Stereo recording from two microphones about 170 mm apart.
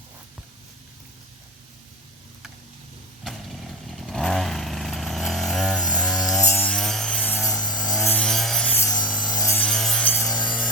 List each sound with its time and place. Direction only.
3.8 s chainsaw: centre (ahead or behind)
6.4 s a sound: 10° left (ahead or behind)
7.5 s wood: 5° left (ahead or behind)
7.9 s rub: 10° left (ahead or behind)
9.3 s wood: 15° left (ahead or behind)
9.6 s wood: 5° left (ahead or behind)